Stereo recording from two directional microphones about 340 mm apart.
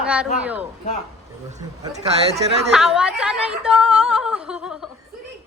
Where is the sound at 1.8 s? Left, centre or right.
Centre.